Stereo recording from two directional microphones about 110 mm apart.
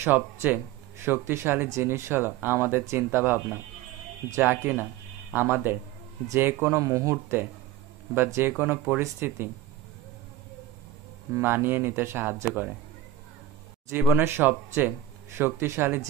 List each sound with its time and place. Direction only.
0.0 s speech: 15° right (ahead or behind)
6.8 s speech: 25° right (ahead or behind)
11.3 s speech: 20° right (ahead or behind)
14.0 s speech: 20° right (ahead or behind)